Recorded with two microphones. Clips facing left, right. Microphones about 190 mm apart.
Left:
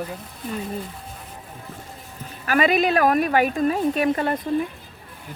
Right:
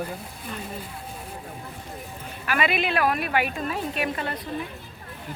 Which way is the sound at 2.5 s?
40° left (ahead or behind).